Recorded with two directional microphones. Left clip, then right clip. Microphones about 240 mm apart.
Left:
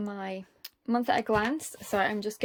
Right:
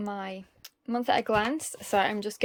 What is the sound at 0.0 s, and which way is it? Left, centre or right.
Speech, centre.